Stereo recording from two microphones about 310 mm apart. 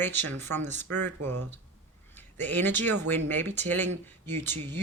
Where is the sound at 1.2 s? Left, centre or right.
Right.